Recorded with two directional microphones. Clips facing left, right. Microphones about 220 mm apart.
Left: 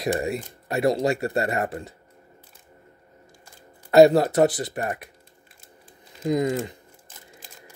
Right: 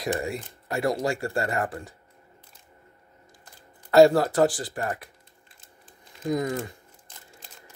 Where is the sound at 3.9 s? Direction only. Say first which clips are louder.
Left 2 dB; 20° left (ahead or behind).